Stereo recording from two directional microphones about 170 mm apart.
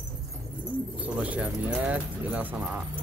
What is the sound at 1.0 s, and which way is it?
Speech, 10° right (ahead or behind).